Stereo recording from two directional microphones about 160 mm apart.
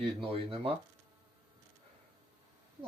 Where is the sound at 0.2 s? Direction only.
35° right (ahead or behind).